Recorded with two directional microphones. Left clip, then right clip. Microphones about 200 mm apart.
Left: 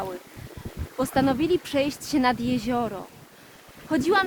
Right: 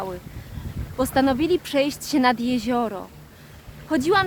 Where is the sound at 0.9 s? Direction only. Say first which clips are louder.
Right 3 dB; 25° right (ahead or behind).